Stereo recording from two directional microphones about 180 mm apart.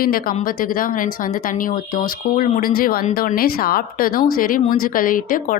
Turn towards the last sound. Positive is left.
turn(degrees=50)  # may be behind; listen again after turning